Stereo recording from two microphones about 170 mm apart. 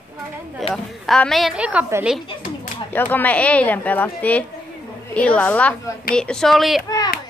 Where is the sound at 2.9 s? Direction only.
10° left (ahead or behind).